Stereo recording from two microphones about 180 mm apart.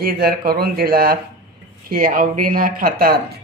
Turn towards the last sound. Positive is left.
turn(degrees=-55)  # may be behind; listen again after turning